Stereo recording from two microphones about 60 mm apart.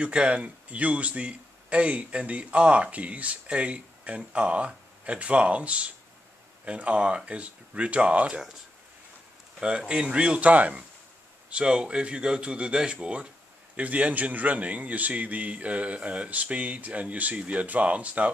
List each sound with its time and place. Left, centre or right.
0.0 s speech: centre
9.6 s speech: centre